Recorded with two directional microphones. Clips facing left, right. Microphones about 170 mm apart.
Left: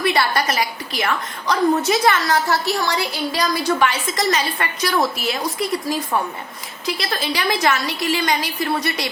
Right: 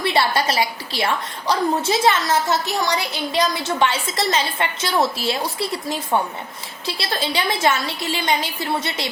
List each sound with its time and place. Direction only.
0.0 s a woman's voice: 25° right (ahead or behind)